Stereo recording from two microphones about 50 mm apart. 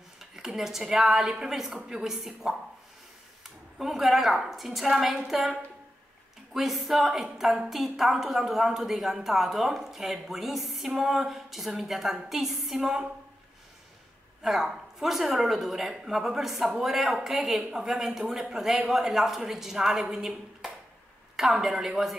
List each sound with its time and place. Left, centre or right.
0.2 s speech: centre
3.7 s speech: centre
6.5 s speech: centre
14.4 s speech: centre